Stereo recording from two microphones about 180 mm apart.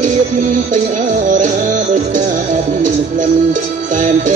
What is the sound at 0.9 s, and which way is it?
Music, 45° right (ahead or behind).